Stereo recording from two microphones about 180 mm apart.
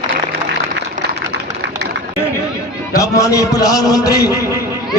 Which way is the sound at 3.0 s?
20° left (ahead or behind).